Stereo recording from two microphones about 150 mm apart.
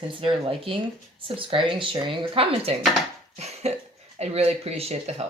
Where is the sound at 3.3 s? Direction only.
45° right (ahead or behind).